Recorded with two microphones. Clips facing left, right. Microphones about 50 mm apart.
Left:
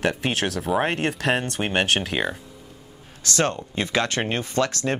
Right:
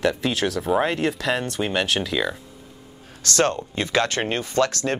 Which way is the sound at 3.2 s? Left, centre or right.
Left.